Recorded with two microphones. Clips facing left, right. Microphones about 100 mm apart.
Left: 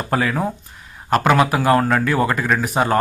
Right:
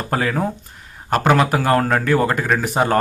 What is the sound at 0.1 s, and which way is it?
Speech, 40° right (ahead or behind).